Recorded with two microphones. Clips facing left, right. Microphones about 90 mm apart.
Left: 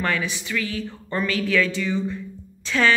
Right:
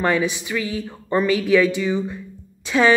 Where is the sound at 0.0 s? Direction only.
20° right (ahead or behind).